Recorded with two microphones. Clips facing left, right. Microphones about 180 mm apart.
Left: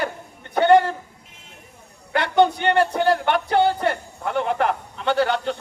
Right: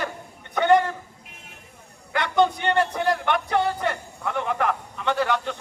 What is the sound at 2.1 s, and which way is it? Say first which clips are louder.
A man's voice: left 3 dB; 30° left (ahead or behind).